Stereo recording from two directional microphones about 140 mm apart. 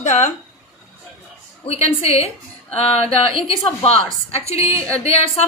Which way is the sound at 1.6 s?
45° left (ahead or behind).